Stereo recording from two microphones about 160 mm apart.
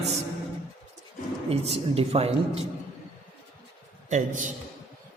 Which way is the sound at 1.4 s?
40° right (ahead or behind).